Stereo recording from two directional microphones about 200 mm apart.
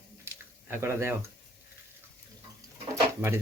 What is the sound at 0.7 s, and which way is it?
Speech, 15° right (ahead or behind).